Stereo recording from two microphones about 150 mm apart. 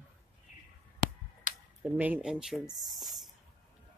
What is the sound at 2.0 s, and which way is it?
Speech, 10° right (ahead or behind).